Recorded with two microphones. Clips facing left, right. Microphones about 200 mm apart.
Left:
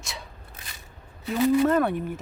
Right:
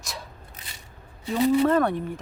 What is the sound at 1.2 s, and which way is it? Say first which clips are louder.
Speech: even; 30° right (ahead or behind).